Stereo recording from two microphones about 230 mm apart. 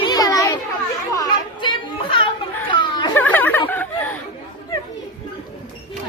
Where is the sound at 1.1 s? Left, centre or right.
Centre.